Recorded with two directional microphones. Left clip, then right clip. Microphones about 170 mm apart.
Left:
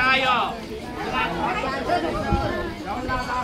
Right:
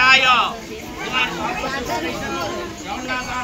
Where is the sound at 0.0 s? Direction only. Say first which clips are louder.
Right 6 dB; 50° left (ahead or behind).